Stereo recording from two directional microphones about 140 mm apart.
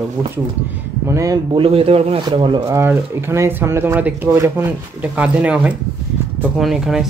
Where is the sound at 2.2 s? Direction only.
35° right (ahead or behind).